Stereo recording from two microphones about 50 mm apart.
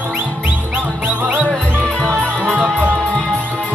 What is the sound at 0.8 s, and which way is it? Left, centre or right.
Music, right.